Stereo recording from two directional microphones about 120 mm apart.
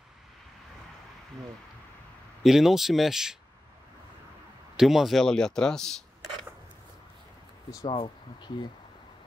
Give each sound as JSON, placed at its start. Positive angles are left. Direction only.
{"t": 2.4, "sound": "speech", "side_deg": -5}
{"t": 4.7, "sound": "speech", "side_deg": 0}
{"t": 7.7, "sound": "speech", "side_deg": 40}